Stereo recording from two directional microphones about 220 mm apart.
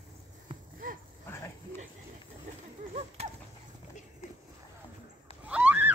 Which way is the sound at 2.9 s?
30° right (ahead or behind).